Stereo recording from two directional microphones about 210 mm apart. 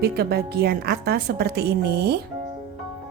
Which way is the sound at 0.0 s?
50° right (ahead or behind).